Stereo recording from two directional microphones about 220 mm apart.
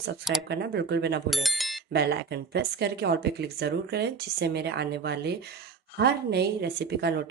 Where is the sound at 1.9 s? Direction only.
50° right (ahead or behind).